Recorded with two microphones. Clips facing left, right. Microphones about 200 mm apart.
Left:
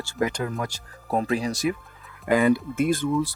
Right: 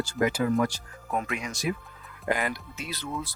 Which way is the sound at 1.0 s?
35° left (ahead or behind).